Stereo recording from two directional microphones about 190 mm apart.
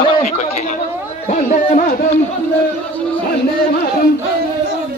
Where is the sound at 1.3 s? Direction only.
45° left (ahead or behind).